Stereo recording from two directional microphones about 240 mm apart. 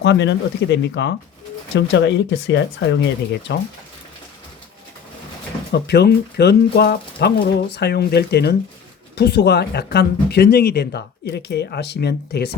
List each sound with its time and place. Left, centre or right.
0.0 s speech: left
5.7 s speech: left